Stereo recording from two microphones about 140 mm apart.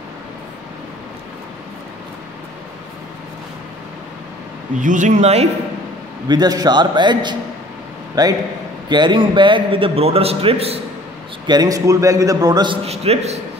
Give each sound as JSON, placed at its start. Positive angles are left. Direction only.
{"t": 4.7, "sound": "speech", "side_deg": -65}
{"t": 6.2, "sound": "a man's voice", "side_deg": -30}
{"t": 11.4, "sound": "a man's voice", "side_deg": -30}
{"t": 12.8, "sound": "a man's voice", "side_deg": -50}